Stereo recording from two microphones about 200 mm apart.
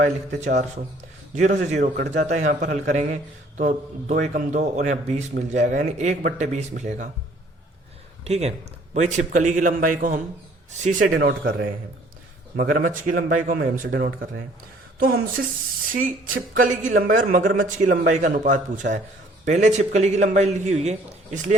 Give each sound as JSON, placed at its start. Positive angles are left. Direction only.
{"t": 0.3, "sound": "a man's voice", "side_deg": -35}
{"t": 8.2, "sound": "a man's voice", "side_deg": -30}
{"t": 11.2, "sound": "a man's voice", "side_deg": -50}